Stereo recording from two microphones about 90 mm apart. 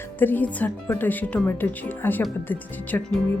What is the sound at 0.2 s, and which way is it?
Speech, 20° left (ahead or behind).